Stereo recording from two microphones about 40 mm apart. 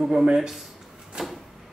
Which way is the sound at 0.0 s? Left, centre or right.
Centre.